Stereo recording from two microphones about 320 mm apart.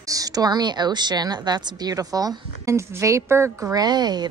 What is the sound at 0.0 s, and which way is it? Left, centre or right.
A woman's voice, centre.